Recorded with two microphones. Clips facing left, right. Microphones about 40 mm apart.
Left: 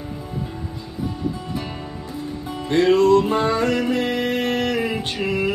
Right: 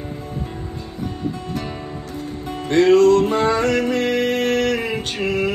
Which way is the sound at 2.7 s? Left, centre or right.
Left.